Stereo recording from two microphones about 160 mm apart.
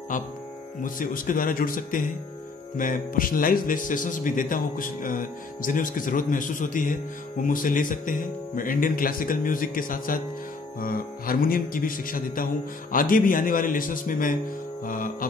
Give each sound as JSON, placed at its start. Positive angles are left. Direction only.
{"t": 0.1, "sound": "speech", "side_deg": 55}